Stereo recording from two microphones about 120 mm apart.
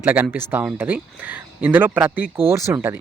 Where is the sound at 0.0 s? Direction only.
15° right (ahead or behind).